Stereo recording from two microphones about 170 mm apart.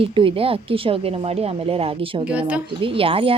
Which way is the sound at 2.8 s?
30° right (ahead or behind).